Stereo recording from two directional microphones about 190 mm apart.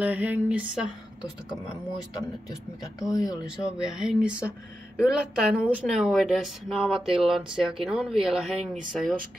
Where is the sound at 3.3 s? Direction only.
5° right (ahead or behind).